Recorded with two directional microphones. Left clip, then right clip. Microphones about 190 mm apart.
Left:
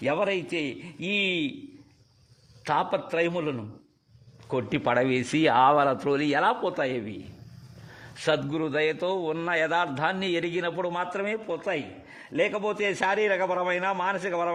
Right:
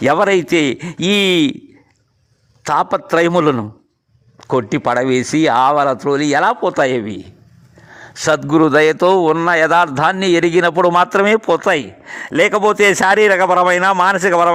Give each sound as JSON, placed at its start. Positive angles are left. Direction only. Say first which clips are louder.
{"t": 0.0, "sound": "a man's voice", "louder": "right 13 dB", "side_deg": -45}
{"t": 2.6, "sound": "speech", "louder": "right 11 dB", "side_deg": -35}
{"t": 9.3, "sound": "a man's voice", "louder": "right 14 dB", "side_deg": -35}